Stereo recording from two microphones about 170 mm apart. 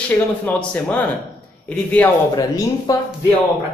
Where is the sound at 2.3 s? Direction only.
20° left (ahead or behind).